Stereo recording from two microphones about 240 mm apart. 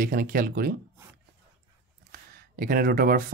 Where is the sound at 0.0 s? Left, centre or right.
Right.